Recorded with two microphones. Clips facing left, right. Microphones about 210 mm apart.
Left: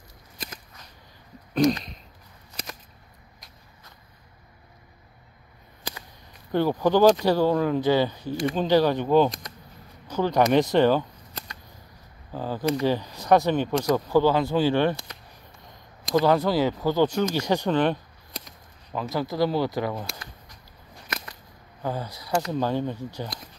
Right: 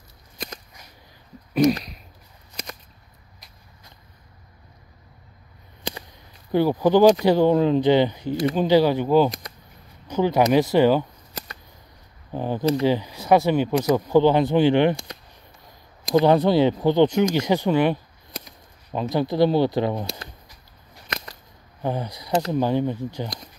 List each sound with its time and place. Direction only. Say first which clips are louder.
1.5 s a sound: right 3 dB; 5° right (ahead or behind)
6.5 s speech: right 3 dB; 15° right (ahead or behind)
16.2 s speech: right 4 dB; 25° right (ahead or behind)
19.1 s speech: right 5 dB; 25° right (ahead or behind)
21.8 s speech: right 4 dB; 20° right (ahead or behind)